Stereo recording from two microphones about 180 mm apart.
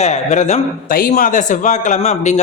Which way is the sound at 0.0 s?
40° left (ahead or behind).